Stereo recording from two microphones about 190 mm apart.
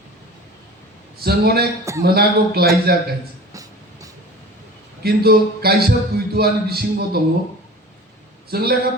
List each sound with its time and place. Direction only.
1.2 s a man's voice: 55° right (ahead or behind)
1.8 s a man's voice: 15° right (ahead or behind)
2.0 s a man's voice: 55° right (ahead or behind)
3.5 s train: 20° right (ahead or behind)
5.0 s a man's voice: 55° right (ahead or behind)
8.4 s a man's voice: 55° right (ahead or behind)